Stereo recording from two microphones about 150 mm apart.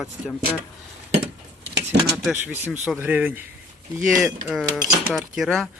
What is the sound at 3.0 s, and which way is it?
Speech, 10° right (ahead or behind).